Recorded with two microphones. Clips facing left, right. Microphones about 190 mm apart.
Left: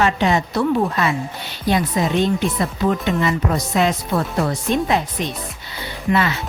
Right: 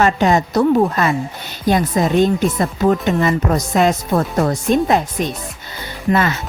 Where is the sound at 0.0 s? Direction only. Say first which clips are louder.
Right 3 dB; 45° right (ahead or behind).